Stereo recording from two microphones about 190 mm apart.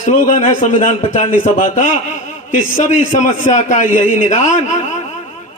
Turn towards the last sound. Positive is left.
turn(degrees=40)  # may be behind; listen again after turning